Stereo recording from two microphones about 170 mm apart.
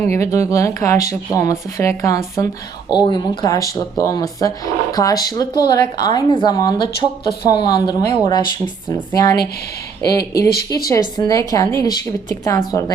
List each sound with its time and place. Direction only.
0.0 s speech: 15° left (ahead or behind)